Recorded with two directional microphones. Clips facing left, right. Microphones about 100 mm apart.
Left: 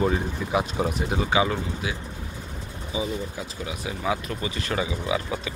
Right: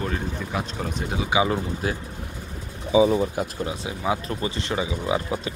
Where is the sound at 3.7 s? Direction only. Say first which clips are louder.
Right 1 dB; 30° right (ahead or behind).